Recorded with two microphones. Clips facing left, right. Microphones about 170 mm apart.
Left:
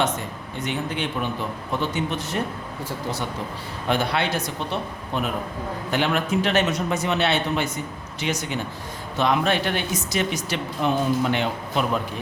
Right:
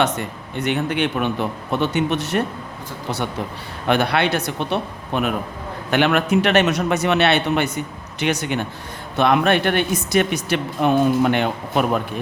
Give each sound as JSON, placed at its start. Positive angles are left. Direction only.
{"t": 0.0, "sound": "a man's voice", "side_deg": -65}
{"t": 3.8, "sound": "a man's voice", "side_deg": -65}